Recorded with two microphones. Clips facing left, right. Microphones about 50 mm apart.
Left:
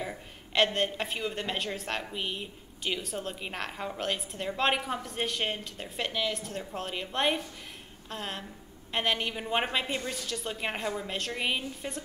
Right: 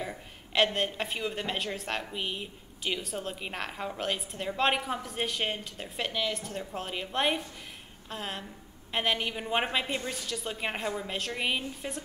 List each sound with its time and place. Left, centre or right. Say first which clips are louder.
0.0 s a woman's voice: even; centre